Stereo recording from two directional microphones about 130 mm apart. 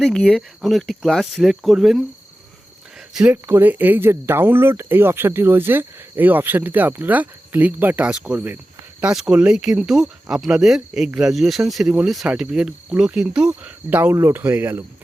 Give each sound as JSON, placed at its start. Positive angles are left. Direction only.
{"t": 0.0, "sound": "speech", "side_deg": 5}
{"t": 3.1, "sound": "speech", "side_deg": -5}
{"t": 3.3, "sound": "speech", "side_deg": -15}